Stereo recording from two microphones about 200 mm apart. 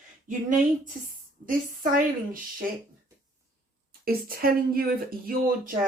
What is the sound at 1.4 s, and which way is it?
Speech, 45° right (ahead or behind).